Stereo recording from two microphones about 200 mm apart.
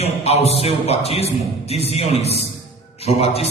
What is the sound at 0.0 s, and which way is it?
A man's voice, 30° left (ahead or behind).